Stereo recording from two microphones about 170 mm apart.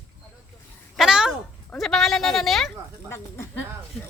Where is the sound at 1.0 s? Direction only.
5° right (ahead or behind).